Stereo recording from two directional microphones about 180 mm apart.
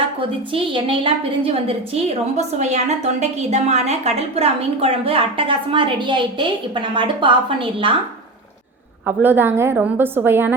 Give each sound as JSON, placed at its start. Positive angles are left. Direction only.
{"t": 0.2, "sound": "a woman's voice", "side_deg": -30}
{"t": 9.0, "sound": "a woman's voice", "side_deg": -10}